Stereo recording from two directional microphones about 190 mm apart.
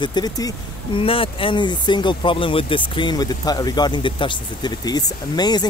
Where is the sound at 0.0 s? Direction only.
20° left (ahead or behind).